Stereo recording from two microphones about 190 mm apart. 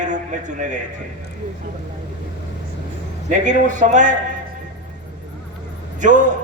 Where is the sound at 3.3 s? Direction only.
40° right (ahead or behind).